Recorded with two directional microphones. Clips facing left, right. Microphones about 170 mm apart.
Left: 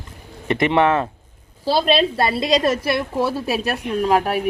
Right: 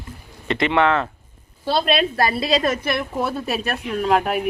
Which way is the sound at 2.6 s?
30° left (ahead or behind).